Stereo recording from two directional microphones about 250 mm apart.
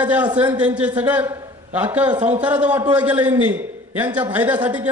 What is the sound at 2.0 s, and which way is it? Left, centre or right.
Speech, centre.